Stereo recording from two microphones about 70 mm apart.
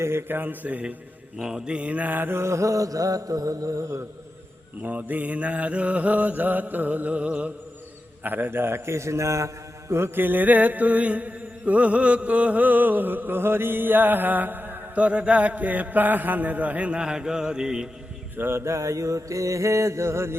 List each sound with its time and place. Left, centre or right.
0.0 s mantra: right
1.4 s mantra: centre; by 4.0 s right
4.8 s mantra: right
8.2 s a man's voice: right
9.9 s mantra: right; by 17.8 s centre
18.3 s mantra: right